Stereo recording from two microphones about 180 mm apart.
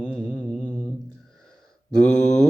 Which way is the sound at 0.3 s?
5° right (ahead or behind).